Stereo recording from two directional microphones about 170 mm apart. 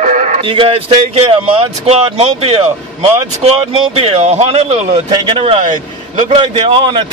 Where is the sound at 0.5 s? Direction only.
35° right (ahead or behind).